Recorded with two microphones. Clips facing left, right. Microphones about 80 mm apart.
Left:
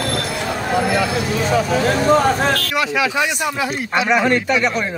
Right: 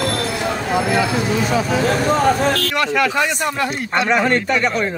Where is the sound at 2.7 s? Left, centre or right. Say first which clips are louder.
Right 1 dB; centre.